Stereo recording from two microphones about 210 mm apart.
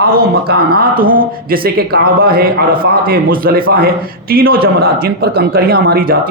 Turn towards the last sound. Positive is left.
turn(degrees=-45)  # may be behind; listen again after turning